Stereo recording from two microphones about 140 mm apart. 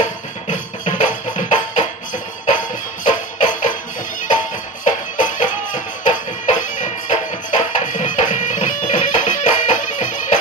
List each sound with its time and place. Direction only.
0.0 s music: 60° left (ahead or behind)
3.0 s music: 65° left (ahead or behind)
4.8 s music: 65° left (ahead or behind)